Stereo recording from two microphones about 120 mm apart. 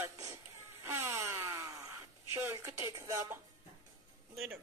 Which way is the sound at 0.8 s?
20° right (ahead or behind).